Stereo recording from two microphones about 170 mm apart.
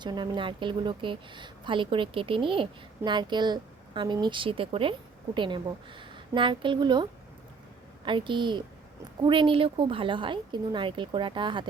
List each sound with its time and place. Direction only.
0.0 s speech: 25° right (ahead or behind)